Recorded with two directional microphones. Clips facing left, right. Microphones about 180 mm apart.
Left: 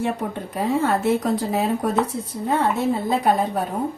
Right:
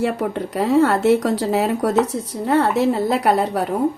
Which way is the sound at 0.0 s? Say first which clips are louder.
Right 4 dB; 75° right (ahead or behind).